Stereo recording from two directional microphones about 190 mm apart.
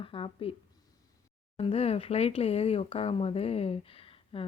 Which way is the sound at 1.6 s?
30° left (ahead or behind).